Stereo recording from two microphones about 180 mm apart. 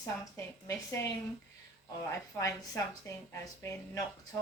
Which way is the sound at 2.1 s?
20° left (ahead or behind).